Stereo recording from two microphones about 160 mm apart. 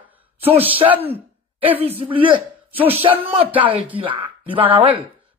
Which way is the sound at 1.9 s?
35° right (ahead or behind).